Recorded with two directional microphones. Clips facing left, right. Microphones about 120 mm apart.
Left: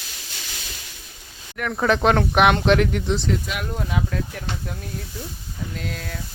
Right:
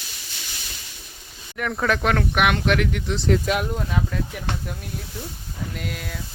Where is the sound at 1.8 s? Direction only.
25° left (ahead or behind).